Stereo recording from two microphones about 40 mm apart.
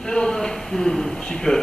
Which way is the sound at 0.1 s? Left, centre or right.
Left.